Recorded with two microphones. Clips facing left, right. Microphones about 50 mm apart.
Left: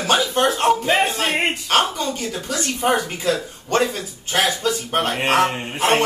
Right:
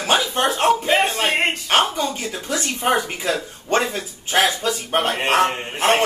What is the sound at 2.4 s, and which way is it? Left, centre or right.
Speech, right.